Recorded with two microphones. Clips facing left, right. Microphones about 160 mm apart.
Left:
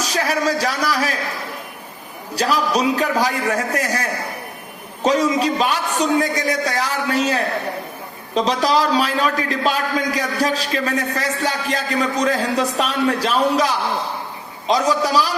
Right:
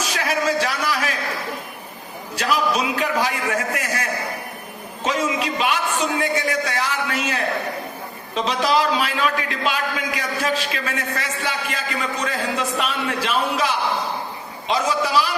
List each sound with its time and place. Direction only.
0.0 s speech: 40° left (ahead or behind)
2.3 s a man's voice: 35° left (ahead or behind)
5.0 s a man's voice: 40° left (ahead or behind)